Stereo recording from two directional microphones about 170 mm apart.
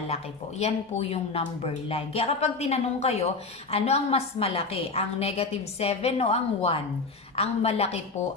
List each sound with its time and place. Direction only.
0.6 s a woman's voice: 35° left (ahead or behind)